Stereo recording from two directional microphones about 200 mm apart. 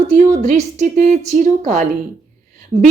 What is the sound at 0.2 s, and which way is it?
Speech, 35° right (ahead or behind).